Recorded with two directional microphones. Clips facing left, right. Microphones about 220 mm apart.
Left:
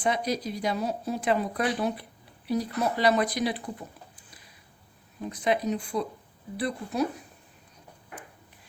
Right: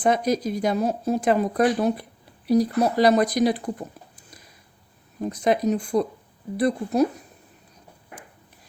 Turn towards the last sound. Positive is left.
turn(degrees=-45)  # may be behind; listen again after turning